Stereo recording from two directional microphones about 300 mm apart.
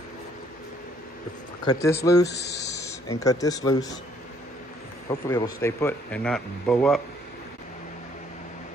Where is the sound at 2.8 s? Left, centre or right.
Centre.